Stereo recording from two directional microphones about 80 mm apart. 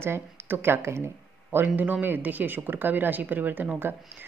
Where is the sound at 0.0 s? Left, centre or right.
Right.